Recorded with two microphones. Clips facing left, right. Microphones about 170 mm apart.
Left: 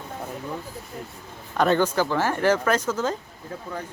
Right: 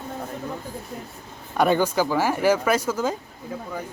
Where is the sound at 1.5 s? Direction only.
10° right (ahead or behind).